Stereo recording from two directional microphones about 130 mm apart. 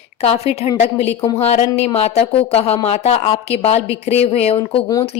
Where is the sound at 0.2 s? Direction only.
50° left (ahead or behind).